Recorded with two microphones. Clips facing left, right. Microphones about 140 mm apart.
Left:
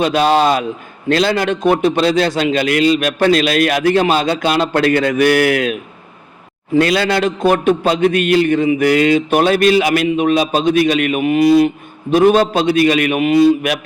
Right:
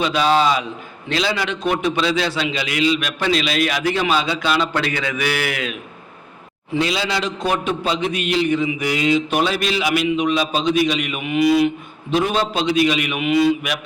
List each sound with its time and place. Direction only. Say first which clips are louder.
0.0 s a man's voice: left 4 dB; 50° left (ahead or behind)
6.7 s a man's voice: left 7 dB; 55° left (ahead or behind)